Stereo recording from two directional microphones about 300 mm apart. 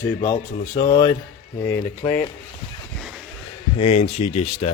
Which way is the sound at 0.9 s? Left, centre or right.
Centre.